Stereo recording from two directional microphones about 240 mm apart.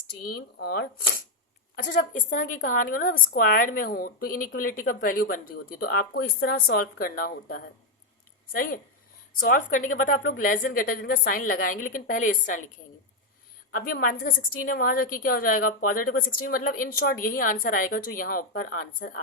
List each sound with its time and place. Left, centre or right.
0.3 s a woman's voice: left
13.7 s a woman's voice: left